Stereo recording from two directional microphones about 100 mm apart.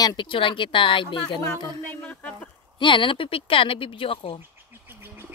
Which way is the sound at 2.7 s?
55° left (ahead or behind).